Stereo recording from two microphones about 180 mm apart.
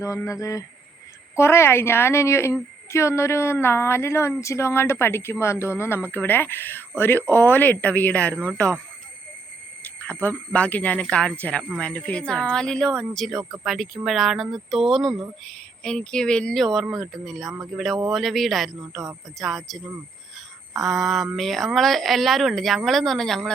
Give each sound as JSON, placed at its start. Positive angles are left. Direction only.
{"t": 0.0, "sound": "a woman's voice", "side_deg": 15}
{"t": 9.8, "sound": "a woman's voice", "side_deg": 10}